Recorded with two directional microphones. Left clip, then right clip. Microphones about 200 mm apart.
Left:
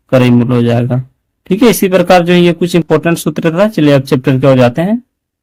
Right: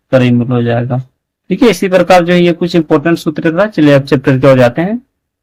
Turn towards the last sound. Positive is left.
turn(degrees=30)  # may be behind; listen again after turning